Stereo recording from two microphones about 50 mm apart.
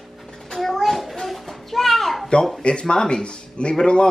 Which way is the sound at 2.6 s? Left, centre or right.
Centre.